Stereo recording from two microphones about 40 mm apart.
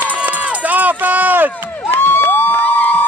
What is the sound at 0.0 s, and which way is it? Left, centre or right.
Run, right.